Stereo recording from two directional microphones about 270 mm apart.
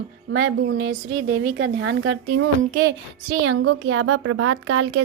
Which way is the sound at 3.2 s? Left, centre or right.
Right.